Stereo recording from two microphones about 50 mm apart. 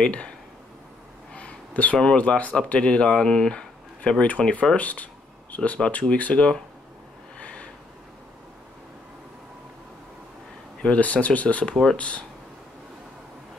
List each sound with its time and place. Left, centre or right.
0.0 s speech: left
1.3 s a sound: left
2.0 s speech: left
7.3 s snort: left
11.0 s speech: left